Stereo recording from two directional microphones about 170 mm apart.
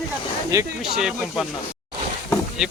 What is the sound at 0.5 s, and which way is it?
Speech, 20° right (ahead or behind).